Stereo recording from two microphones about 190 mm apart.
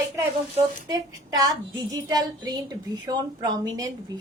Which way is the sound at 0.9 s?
20° right (ahead or behind).